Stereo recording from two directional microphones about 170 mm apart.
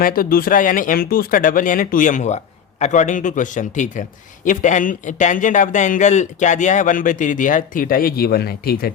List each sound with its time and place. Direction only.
0.0 s speech: 55° left (ahead or behind)